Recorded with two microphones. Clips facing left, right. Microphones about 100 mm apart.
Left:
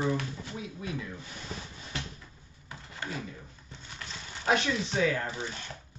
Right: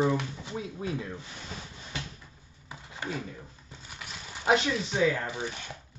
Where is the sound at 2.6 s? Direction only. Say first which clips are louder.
Right 2 dB; 15° right (ahead or behind).